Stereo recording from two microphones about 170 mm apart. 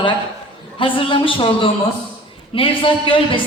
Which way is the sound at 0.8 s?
30° left (ahead or behind).